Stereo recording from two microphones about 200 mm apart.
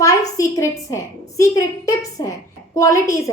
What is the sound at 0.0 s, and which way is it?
A woman's voice, 15° left (ahead or behind).